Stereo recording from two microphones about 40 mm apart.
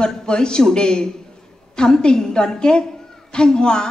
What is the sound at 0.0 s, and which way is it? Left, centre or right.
A woman's voice, centre.